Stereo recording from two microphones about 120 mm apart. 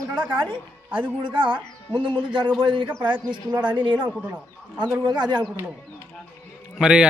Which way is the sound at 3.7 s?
40° right (ahead or behind).